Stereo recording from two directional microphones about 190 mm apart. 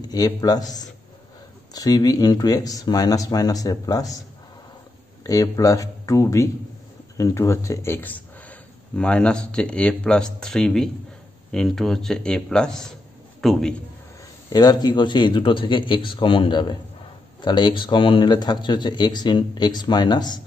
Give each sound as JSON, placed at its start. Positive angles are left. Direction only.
{"t": 0.0, "sound": "a man's voice", "side_deg": 20}
{"t": 5.2, "sound": "a man's voice", "side_deg": 20}
{"t": 14.5, "sound": "a man's voice", "side_deg": 20}